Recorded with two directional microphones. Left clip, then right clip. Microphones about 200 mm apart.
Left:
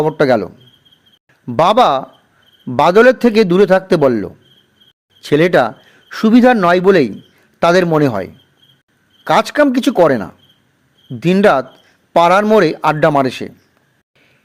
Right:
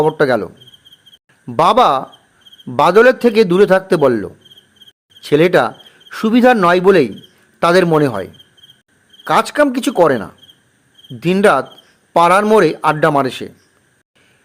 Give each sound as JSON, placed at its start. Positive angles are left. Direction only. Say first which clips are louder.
{"t": 0.0, "sound": "a man's voice", "louder": "left 1 dB", "side_deg": 15}